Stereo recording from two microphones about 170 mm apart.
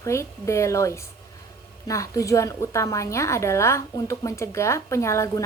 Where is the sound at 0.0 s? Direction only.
15° left (ahead or behind).